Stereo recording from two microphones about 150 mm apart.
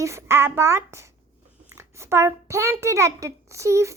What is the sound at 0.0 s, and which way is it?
A child's voice, 20° right (ahead or behind).